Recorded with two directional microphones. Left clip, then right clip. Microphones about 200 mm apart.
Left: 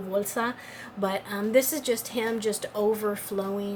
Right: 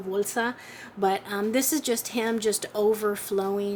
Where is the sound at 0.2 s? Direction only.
35° right (ahead or behind).